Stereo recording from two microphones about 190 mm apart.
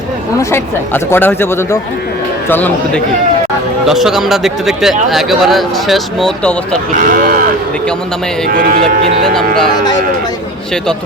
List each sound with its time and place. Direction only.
0.5 s speech: 10° left (ahead or behind)
3.8 s speech: centre (ahead or behind)
7.0 s speech: 45° right (ahead or behind)
8.8 s speech: centre (ahead or behind)